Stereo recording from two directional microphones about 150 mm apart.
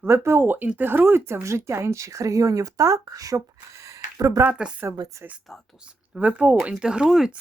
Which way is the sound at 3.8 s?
20° right (ahead or behind).